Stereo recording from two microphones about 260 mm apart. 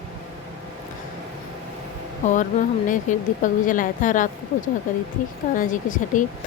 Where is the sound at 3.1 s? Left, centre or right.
Left.